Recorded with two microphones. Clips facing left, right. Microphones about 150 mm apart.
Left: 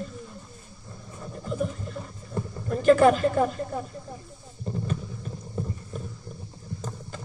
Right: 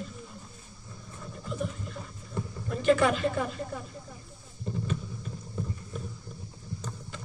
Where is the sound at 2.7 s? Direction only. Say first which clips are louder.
Left 6 dB; 45° left (ahead or behind).